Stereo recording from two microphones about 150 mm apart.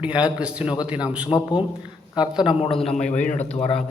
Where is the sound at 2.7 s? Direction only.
Centre (ahead or behind).